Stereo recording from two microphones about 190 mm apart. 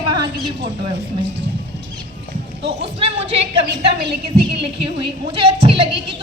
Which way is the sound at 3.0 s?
30° right (ahead or behind).